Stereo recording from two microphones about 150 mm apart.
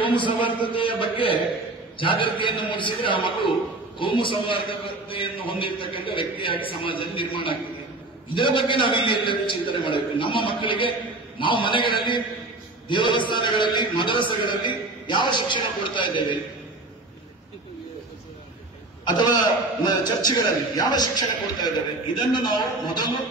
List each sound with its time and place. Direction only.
0.0 s a man's voice: 35° left (ahead or behind)
19.9 s a man's voice: 25° left (ahead or behind)